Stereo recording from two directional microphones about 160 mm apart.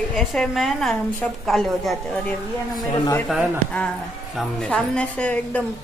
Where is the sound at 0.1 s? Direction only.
Centre (ahead or behind).